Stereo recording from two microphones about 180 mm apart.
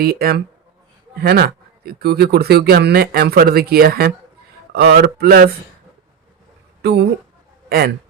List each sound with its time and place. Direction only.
0.0 s speech: 55° right (ahead or behind)
7.7 s speech: 60° right (ahead or behind)